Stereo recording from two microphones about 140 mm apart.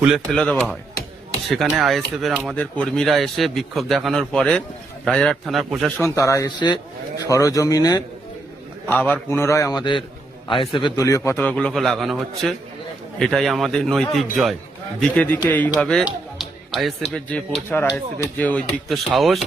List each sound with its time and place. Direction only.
0.0 s a man's voice: centre (ahead or behind)
2.6 s a man's voice: 10° left (ahead or behind)
6.0 s a man's voice: 20° left (ahead or behind)
8.9 s a man's voice: 10° left (ahead or behind)
10.6 s a man's voice: 40° left (ahead or behind); by 11.3 s 20° left (ahead or behind)
11.3 s a man's voice: 5° left (ahead or behind)
15.1 s a man's voice: 10° left (ahead or behind)
16.0 s music: centre (ahead or behind)
17.1 s a man's voice: 10° left (ahead or behind)
18.9 s a man's voice: centre (ahead or behind)